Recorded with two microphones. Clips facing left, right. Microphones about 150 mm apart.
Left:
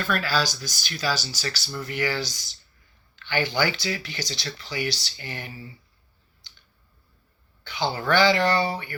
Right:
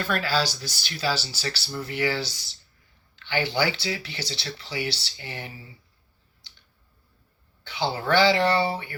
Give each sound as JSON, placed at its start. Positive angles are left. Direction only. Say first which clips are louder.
{"t": 0.0, "sound": "speech", "louder": "even", "side_deg": -25}
{"t": 7.8, "sound": "speech", "louder": "even", "side_deg": -25}